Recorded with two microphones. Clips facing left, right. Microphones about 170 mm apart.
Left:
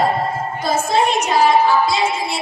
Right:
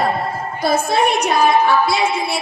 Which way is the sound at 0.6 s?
65° right (ahead or behind).